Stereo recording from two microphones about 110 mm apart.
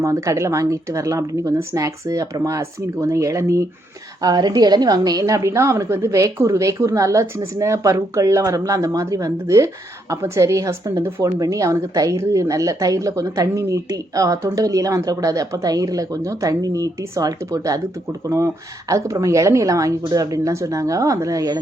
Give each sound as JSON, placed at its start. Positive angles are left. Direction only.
{"t": 0.0, "sound": "a woman's voice", "side_deg": -30}